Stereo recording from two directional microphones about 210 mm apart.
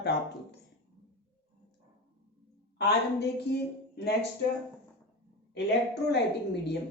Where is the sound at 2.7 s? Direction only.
55° left (ahead or behind).